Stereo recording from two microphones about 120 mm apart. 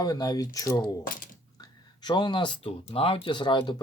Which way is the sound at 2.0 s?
40° left (ahead or behind).